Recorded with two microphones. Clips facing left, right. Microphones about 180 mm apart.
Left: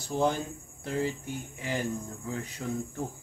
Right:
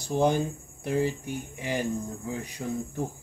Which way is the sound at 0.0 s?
15° right (ahead or behind).